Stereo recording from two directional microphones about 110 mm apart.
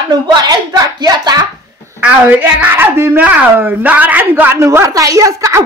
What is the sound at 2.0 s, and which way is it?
A woman's voice, 10° right (ahead or behind).